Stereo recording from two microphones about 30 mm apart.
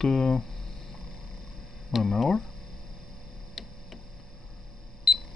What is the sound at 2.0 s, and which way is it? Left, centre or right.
Speech, centre.